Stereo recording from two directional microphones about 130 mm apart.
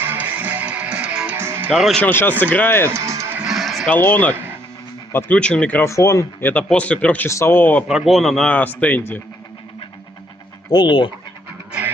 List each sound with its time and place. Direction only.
0.0 s music: 15° right (ahead or behind)
1.7 s speech: centre (ahead or behind)
2.0 s speech: 15° left (ahead or behind)
2.9 s music: 25° right (ahead or behind)
3.3 s music: centre (ahead or behind)
3.8 s speech: 15° left (ahead or behind)
5.9 s speech: 25° left (ahead or behind)
6.5 s speech: 10° left (ahead or behind)
7.9 s speech: 5° right (ahead or behind); by 9.2 s 15° left (ahead or behind)
10.7 s speech: 35° left (ahead or behind)